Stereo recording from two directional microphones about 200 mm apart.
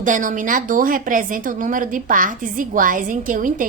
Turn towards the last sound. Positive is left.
turn(degrees=-40)  # may be behind; listen again after turning